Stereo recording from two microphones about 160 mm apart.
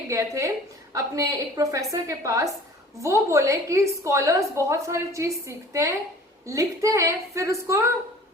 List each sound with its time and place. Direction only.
0.1 s a woman's voice: 20° right (ahead or behind)